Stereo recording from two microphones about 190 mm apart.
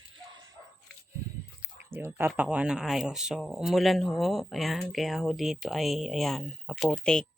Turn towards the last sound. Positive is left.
turn(degrees=5)  # may be behind; listen again after turning